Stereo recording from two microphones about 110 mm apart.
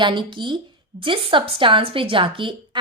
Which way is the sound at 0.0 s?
45° right (ahead or behind).